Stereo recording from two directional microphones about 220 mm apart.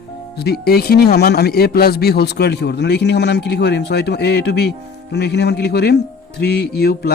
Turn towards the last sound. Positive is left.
turn(degrees=45)  # may be behind; listen again after turning